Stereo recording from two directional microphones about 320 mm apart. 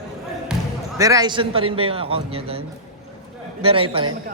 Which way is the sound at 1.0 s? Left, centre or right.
Centre.